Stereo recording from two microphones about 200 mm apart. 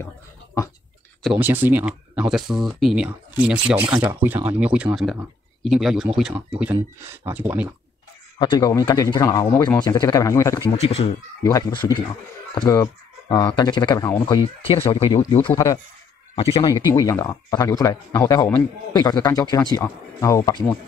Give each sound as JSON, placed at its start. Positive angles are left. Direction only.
{"t": 1.2, "sound": "speech", "side_deg": -5}
{"t": 8.4, "sound": "speech", "side_deg": 20}
{"t": 16.3, "sound": "speech", "side_deg": 30}
{"t": 16.7, "sound": "speech", "side_deg": 15}